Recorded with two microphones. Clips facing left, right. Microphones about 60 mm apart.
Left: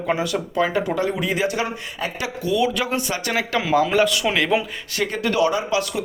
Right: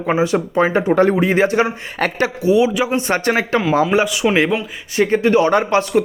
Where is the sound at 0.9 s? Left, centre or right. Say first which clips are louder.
Right 9 dB; right.